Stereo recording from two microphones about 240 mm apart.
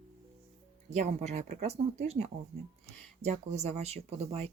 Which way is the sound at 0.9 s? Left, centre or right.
Right.